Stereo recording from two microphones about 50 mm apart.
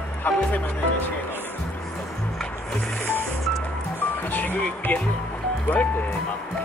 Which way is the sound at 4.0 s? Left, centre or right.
Left.